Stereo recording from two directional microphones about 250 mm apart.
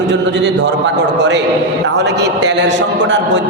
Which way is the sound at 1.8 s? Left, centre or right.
Right.